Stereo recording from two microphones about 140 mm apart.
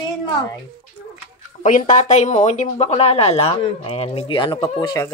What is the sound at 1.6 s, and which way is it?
Speech, 65° left (ahead or behind).